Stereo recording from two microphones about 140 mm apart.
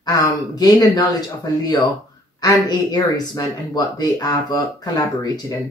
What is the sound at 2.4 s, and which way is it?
Speech, 30° left (ahead or behind).